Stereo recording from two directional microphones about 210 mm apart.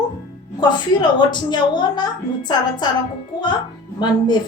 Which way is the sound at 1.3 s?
20° left (ahead or behind).